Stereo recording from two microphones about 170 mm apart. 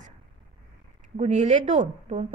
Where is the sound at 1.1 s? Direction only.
40° right (ahead or behind).